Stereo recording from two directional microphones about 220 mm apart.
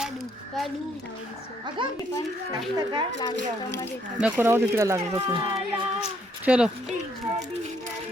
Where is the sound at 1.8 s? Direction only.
20° right (ahead or behind).